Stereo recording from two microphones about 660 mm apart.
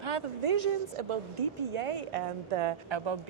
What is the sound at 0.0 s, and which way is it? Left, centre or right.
A woman's voice, right.